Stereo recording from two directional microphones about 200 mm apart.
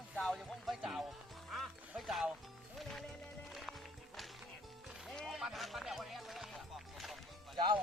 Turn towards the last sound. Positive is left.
turn(degrees=-25)  # may be behind; listen again after turning